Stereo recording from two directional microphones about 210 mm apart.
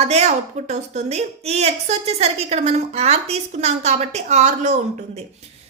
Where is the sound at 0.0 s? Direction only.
30° right (ahead or behind).